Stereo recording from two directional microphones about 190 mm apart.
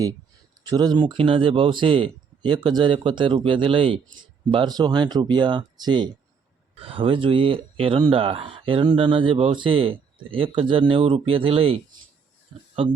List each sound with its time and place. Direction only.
0.6 s speech: 20° right (ahead or behind)